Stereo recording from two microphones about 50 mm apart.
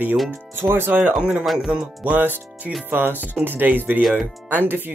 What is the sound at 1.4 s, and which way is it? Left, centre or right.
Speech, centre.